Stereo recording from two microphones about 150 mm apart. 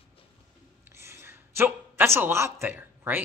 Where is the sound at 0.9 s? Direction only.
15° right (ahead or behind).